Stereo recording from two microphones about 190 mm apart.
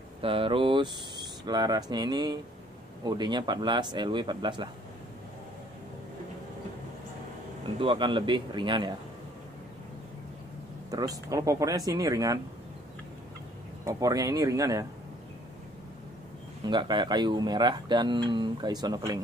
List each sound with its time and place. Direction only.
0.2 s speech: 30° right (ahead or behind)
7.8 s speech: 25° right (ahead or behind)
10.9 s speech: 20° right (ahead or behind)
13.8 s speech: 20° right (ahead or behind)
16.6 s speech: 25° right (ahead or behind)